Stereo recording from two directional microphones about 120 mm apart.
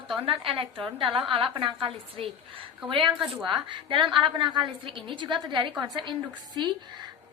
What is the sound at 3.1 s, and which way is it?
Speech, 5° right (ahead or behind).